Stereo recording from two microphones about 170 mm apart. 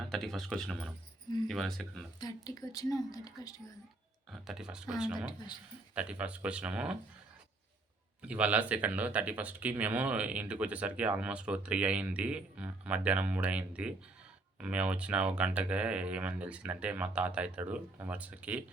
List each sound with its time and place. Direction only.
0.1 s speech: centre (ahead or behind)
2.2 s a woman's voice: 20° left (ahead or behind)
4.3 s speech: 5° right (ahead or behind)
8.2 s speech: 5° right (ahead or behind)